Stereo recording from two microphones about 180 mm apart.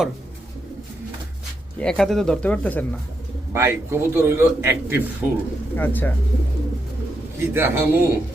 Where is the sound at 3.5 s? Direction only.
15° right (ahead or behind).